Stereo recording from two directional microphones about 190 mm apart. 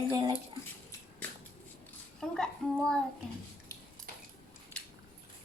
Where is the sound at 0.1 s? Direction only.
20° right (ahead or behind).